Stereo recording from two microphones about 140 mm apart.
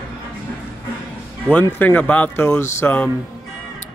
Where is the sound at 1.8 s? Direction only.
10° left (ahead or behind).